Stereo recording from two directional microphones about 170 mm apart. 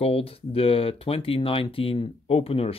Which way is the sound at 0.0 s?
35° left (ahead or behind).